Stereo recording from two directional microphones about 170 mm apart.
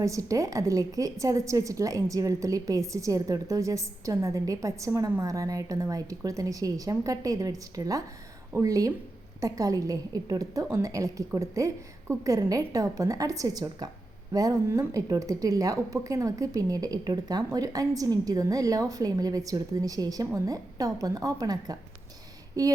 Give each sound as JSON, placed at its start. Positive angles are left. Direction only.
{"t": 0.0, "sound": "a woman's voice", "side_deg": -20}